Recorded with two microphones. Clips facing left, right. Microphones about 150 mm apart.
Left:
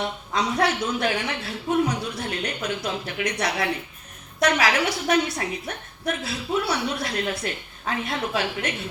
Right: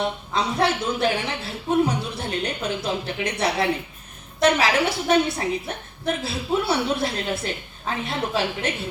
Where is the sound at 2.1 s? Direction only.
30° right (ahead or behind).